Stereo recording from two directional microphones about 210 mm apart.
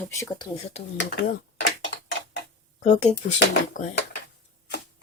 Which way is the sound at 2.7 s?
35° left (ahead or behind).